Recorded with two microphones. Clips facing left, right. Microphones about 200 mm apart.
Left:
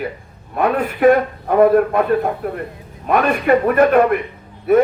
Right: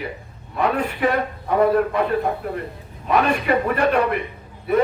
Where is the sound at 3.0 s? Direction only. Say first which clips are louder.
Left 3 dB; 50° left (ahead or behind).